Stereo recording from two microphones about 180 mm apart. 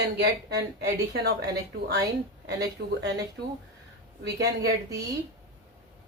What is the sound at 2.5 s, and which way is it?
Speech, 70° right (ahead or behind).